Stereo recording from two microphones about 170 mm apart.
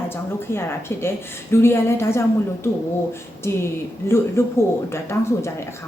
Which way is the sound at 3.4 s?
15° left (ahead or behind).